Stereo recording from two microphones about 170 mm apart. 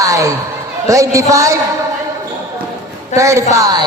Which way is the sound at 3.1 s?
20° right (ahead or behind).